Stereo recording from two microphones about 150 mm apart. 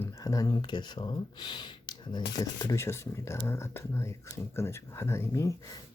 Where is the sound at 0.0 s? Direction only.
20° left (ahead or behind).